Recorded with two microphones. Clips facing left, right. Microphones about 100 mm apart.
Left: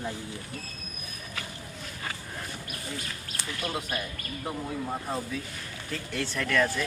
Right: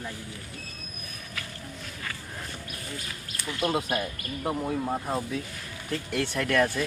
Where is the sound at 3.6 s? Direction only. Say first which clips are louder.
Right 7 dB; 30° right (ahead or behind).